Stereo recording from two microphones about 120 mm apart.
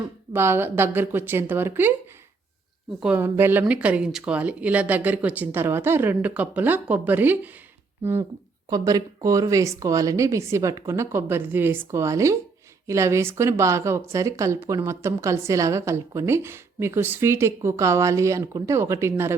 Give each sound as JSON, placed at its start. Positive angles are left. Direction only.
{"t": 0.3, "sound": "speech", "side_deg": -20}
{"t": 3.2, "sound": "speech", "side_deg": -20}
{"t": 8.7, "sound": "speech", "side_deg": -30}